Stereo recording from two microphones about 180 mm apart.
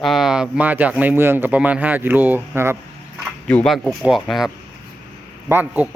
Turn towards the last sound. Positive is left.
turn(degrees=-10)  # may be behind; listen again after turning